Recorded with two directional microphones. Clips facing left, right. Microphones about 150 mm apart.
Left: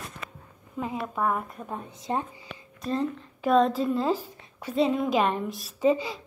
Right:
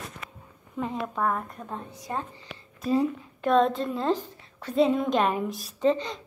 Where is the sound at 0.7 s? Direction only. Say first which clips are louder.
Right 1 dB; 5° left (ahead or behind).